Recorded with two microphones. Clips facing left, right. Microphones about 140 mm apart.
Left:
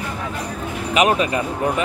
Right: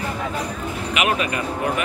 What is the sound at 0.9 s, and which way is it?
Speech, 35° left (ahead or behind).